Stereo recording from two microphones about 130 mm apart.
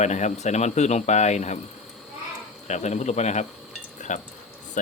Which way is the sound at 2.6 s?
60° left (ahead or behind).